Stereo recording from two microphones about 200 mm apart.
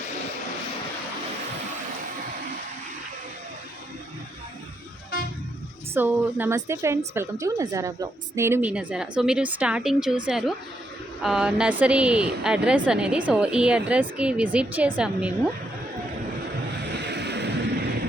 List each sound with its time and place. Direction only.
5.9 s a woman's voice: 10° right (ahead or behind)
16.9 s waves: 60° right (ahead or behind)